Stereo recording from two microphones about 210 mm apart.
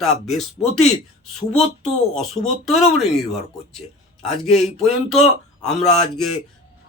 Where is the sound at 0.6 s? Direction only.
30° left (ahead or behind).